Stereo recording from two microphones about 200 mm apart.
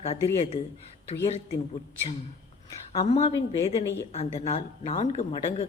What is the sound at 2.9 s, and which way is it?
Speech, 30° left (ahead or behind).